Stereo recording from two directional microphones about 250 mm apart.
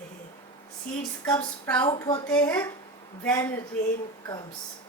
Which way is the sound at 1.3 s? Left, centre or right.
Centre.